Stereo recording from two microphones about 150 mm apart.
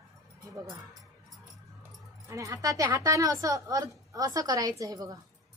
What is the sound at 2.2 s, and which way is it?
A woman's voice, 20° right (ahead or behind).